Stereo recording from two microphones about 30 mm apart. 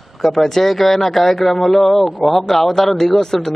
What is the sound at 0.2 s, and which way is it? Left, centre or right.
Speech, centre.